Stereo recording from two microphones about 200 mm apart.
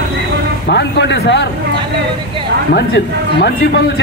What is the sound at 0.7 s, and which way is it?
Speech, 60° left (ahead or behind).